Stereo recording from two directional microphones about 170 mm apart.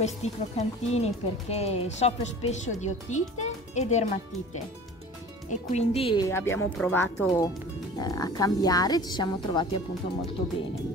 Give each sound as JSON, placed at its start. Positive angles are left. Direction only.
{"t": 0.0, "sound": "speech", "side_deg": 40}
{"t": 5.5, "sound": "speech", "side_deg": 45}
{"t": 6.2, "sound": "speech", "side_deg": 15}